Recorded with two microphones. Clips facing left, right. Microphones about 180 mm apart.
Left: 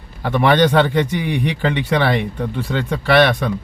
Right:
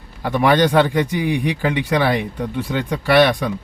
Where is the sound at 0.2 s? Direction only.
10° right (ahead or behind).